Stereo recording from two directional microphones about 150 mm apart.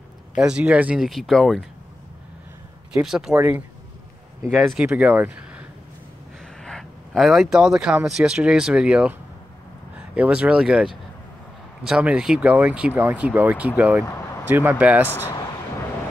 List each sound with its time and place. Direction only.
0.4 s speech: 5° right (ahead or behind)
2.9 s speech: 5° right (ahead or behind)
3.3 s speech: 15° right (ahead or behind)
4.5 s speech: centre (ahead or behind)
6.6 s speech: 5° left (ahead or behind)
14.0 s vehicle: 20° left (ahead or behind)
14.5 s speech: 10° right (ahead or behind)
15.0 s speech: 15° left (ahead or behind)